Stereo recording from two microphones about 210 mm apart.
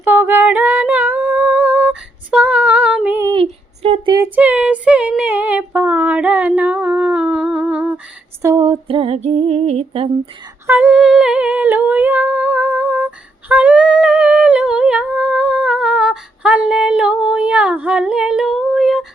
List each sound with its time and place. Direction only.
0.0 s female singing: 10° right (ahead or behind)
3.3 s a sound: 30° right (ahead or behind)
4.4 s female singing: 5° right (ahead or behind)
8.4 s female singing: 15° right (ahead or behind)
10.7 s humming: 5° right (ahead or behind)